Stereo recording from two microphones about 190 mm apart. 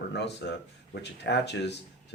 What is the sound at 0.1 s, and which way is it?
Speech, 65° left (ahead or behind).